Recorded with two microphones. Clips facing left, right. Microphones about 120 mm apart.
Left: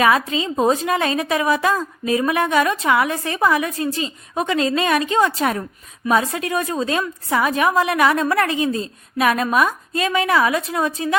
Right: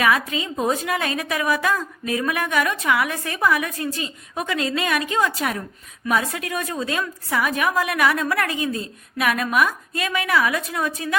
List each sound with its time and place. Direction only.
0.0 s a woman's voice: 30° left (ahead or behind)